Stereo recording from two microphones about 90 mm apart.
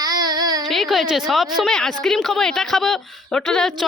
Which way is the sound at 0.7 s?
Centre (ahead or behind).